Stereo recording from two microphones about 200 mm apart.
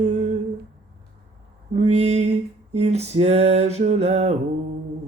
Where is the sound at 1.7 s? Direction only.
35° right (ahead or behind).